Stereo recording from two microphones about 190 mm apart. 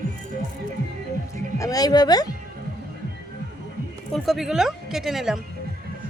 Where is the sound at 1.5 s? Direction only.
20° left (ahead or behind).